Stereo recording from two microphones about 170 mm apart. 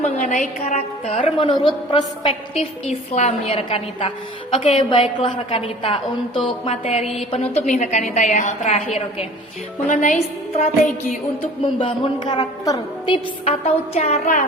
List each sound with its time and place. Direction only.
0.0 s a woman's voice: 50° left (ahead or behind)
9.9 s a woman's voice: 50° left (ahead or behind)
11.6 s a woman's voice: 30° left (ahead or behind)
13.4 s a woman's voice: 40° left (ahead or behind)